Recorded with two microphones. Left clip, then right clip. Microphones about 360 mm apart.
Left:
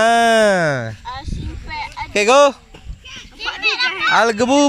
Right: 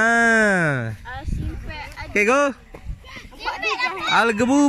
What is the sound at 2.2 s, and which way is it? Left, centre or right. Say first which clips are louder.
Speech: left 6 dB; centre.